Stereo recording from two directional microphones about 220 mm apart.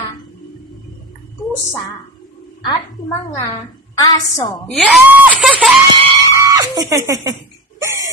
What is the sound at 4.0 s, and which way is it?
Speech, 15° left (ahead or behind).